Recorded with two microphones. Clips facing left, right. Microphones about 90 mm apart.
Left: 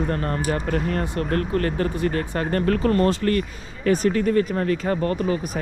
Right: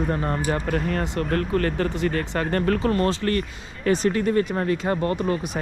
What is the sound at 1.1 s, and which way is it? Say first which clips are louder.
Speech: right 1 dB; 40° left (ahead or behind).